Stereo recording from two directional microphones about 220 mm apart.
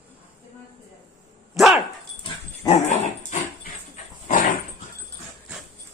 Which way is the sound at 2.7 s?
35° left (ahead or behind).